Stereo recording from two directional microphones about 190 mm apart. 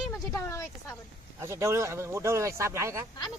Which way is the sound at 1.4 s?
15° right (ahead or behind).